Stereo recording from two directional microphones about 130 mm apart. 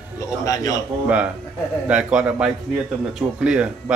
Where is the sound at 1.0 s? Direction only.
10° right (ahead or behind).